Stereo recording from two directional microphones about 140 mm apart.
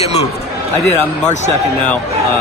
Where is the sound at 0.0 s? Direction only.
50° left (ahead or behind).